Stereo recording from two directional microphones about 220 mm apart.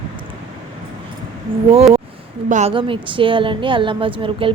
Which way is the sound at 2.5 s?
30° right (ahead or behind).